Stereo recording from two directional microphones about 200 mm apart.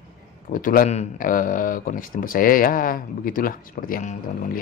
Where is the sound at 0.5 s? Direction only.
45° left (ahead or behind).